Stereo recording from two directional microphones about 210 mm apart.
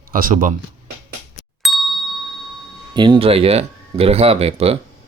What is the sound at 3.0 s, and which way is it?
Speech, 20° right (ahead or behind).